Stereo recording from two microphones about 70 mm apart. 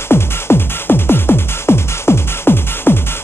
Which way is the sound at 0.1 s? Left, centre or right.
Left.